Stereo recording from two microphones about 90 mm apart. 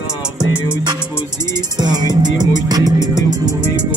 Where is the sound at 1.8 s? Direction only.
50° right (ahead or behind).